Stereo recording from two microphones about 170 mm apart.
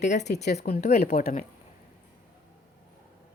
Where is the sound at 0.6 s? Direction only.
65° left (ahead or behind).